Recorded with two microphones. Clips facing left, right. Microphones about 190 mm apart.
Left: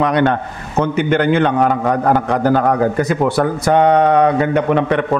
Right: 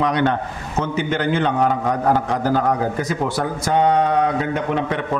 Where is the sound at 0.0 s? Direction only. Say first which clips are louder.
Left 4 dB; 60° left (ahead or behind).